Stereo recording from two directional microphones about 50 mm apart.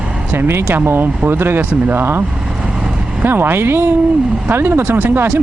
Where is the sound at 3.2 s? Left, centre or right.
Right.